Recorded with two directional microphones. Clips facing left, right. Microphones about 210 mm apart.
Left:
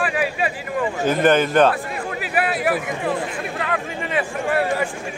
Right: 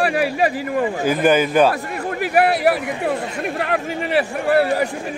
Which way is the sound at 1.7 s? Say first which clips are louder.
Right 2 dB; 40° right (ahead or behind).